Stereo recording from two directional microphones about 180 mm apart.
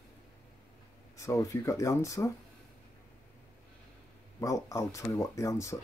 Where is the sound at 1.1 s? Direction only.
15° left (ahead or behind).